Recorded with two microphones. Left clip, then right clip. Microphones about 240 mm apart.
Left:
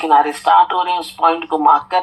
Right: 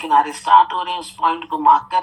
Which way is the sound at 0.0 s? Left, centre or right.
Left.